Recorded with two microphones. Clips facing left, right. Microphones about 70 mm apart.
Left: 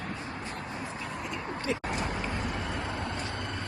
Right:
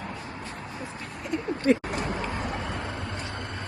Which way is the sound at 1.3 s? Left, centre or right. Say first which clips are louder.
Right 11 dB; right.